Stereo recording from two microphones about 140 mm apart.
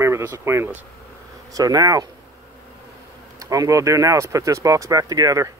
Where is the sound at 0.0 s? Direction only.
20° right (ahead or behind).